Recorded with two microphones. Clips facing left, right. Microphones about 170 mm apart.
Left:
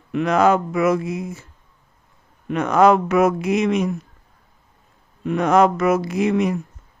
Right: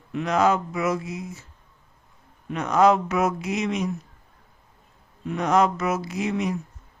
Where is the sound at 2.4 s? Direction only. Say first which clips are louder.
Left 4 dB; 60° left (ahead or behind).